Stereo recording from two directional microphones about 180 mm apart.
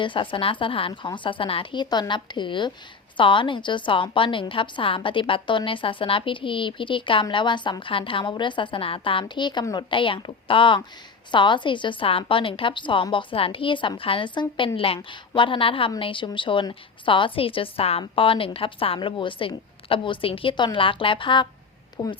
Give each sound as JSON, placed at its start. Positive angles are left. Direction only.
{"t": 0.0, "sound": "a woman's voice", "side_deg": 25}